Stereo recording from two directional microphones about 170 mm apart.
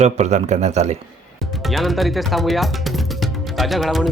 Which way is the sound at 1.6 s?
Centre (ahead or behind).